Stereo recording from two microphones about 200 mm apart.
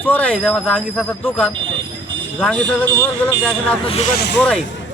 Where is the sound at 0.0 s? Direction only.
10° left (ahead or behind).